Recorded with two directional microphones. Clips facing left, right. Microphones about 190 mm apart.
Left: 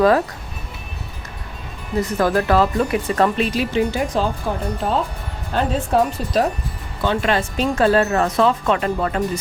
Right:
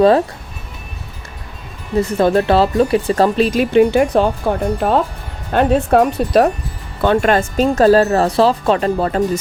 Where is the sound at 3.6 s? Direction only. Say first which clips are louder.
Right 11 dB; 55° right (ahead or behind).